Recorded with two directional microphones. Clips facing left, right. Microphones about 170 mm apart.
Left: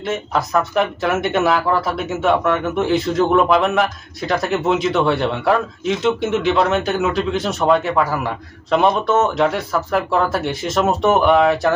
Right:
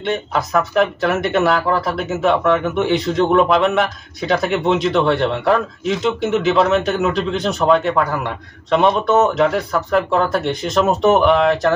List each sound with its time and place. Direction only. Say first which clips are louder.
0.0 s speech: right 1 dB; centre (ahead or behind)